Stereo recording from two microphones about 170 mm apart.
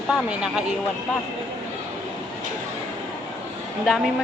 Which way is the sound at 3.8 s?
Centre (ahead or behind).